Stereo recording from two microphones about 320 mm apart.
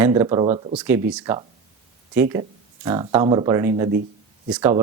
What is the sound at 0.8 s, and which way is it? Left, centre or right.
Speech, centre.